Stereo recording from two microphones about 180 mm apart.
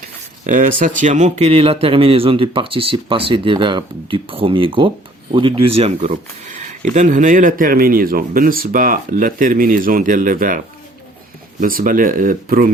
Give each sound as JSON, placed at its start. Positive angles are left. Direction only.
{"t": 0.4, "sound": "speech", "side_deg": -45}
{"t": 11.6, "sound": "speech", "side_deg": -50}